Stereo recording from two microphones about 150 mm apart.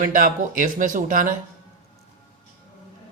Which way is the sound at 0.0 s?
65° right (ahead or behind).